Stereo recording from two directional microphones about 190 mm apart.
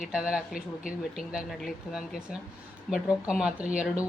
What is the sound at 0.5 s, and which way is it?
Speech, 45° left (ahead or behind).